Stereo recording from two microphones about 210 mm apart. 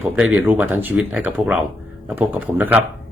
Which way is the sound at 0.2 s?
5° right (ahead or behind).